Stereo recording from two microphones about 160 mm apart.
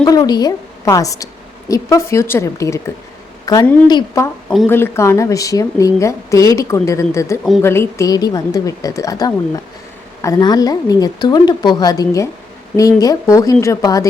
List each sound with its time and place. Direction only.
0.0 s a woman's voice: 25° left (ahead or behind)
4.4 s speech: centre (ahead or behind)
4.7 s a woman's voice: 15° left (ahead or behind)